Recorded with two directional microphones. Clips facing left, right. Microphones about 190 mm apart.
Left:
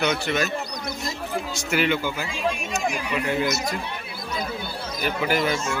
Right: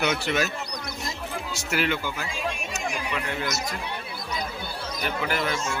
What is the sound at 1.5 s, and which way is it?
Speech, 5° right (ahead or behind).